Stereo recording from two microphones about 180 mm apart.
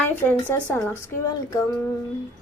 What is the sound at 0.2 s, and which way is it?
Speech, 10° left (ahead or behind).